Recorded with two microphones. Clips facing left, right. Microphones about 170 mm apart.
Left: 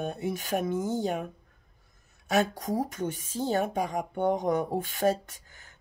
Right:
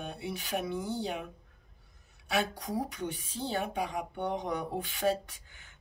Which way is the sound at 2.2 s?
45° left (ahead or behind).